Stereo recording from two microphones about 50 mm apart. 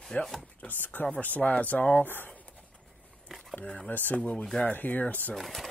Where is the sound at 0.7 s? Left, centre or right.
Left.